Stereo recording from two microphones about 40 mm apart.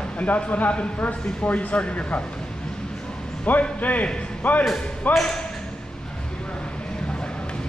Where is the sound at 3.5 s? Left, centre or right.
Left.